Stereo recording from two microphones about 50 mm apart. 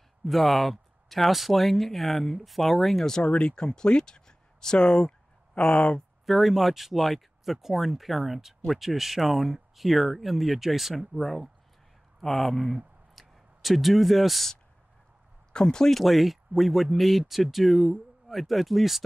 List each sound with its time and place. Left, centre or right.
0.2 s speech: centre
3.3 s speech: centre
6.2 s speech: centre
13.1 s a sound: centre
15.5 s speech: centre
16.0 s speech: centre